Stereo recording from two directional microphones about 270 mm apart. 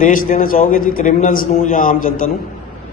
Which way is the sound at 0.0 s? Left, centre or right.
Left.